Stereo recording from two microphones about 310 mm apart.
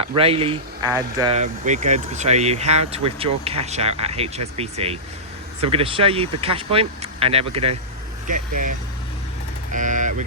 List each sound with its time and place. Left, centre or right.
0.0 s speech: centre
9.7 s speech: right